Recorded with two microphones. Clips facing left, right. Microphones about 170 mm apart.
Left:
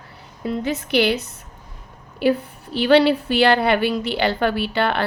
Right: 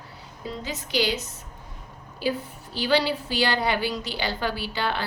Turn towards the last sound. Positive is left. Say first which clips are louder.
# left 7 dB
turn(degrees=60)  # may be behind; listen again after turning